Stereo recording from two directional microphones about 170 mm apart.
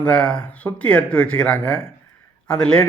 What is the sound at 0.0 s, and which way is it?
A man's voice, 5° left (ahead or behind).